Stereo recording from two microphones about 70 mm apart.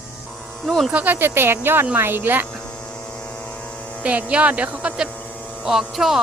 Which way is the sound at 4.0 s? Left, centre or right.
Centre.